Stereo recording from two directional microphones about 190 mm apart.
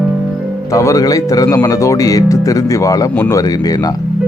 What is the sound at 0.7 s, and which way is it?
Speech, 15° left (ahead or behind).